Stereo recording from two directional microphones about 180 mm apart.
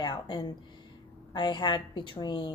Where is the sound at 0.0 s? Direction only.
25° left (ahead or behind).